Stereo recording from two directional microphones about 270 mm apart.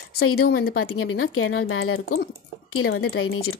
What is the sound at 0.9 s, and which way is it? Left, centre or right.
Speech, left.